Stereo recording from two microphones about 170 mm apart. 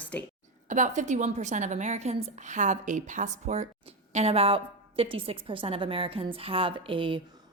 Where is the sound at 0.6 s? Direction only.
45° right (ahead or behind).